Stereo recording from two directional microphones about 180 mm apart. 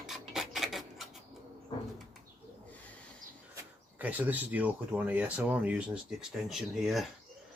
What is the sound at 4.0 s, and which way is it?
Speech, 10° right (ahead or behind).